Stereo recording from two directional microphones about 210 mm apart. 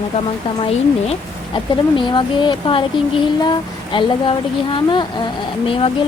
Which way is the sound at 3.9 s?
25° left (ahead or behind).